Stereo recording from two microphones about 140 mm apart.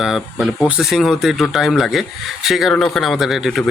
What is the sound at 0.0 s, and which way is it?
Speech, 5° right (ahead or behind).